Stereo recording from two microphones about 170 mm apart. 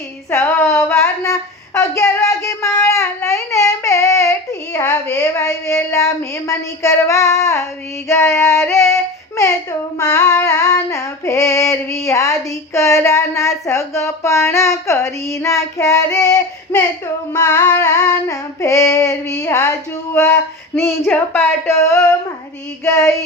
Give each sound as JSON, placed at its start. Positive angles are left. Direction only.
{"t": 0.3, "sound": "female singing", "side_deg": 10}
{"t": 10.0, "sound": "female singing", "side_deg": 20}
{"t": 12.0, "sound": "speech", "side_deg": 20}
{"t": 17.3, "sound": "female singing", "side_deg": 15}
{"t": 20.7, "sound": "female singing", "side_deg": 15}